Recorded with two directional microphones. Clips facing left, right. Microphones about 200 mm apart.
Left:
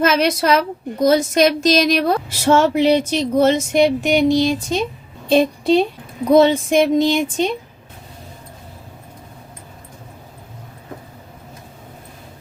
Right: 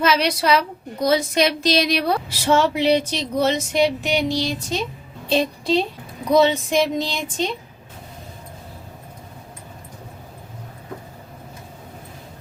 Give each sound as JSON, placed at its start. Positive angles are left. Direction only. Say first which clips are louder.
{"t": 0.0, "sound": "a woman's voice", "louder": "left 3 dB", "side_deg": 50}